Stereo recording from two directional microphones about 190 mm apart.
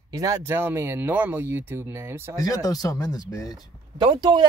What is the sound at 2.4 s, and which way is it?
Speech, 20° left (ahead or behind).